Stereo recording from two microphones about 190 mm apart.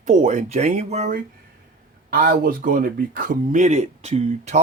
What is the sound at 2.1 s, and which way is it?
Speech, 50° right (ahead or behind).